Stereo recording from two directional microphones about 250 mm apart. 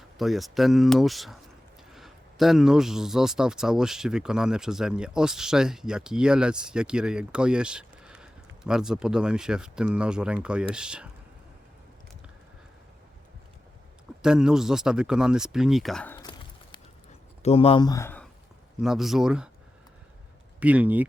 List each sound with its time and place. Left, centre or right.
0.2 s speech: centre
14.2 s speech: centre
17.4 s speech: left; by 19.5 s centre
20.6 s speech: centre